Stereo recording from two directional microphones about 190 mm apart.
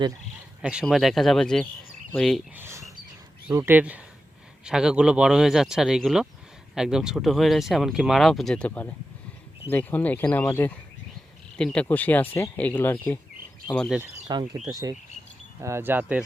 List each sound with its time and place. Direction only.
0.6 s speech: 5° right (ahead or behind)
2.6 s a sound: 15° right (ahead or behind)
3.5 s speech: 10° right (ahead or behind)
14.3 s speech: 20° right (ahead or behind)